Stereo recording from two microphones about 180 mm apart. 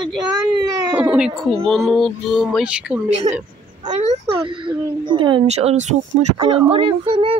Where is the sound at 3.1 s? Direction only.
35° right (ahead or behind).